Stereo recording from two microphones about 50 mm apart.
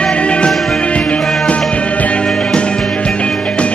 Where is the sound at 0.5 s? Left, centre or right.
Centre.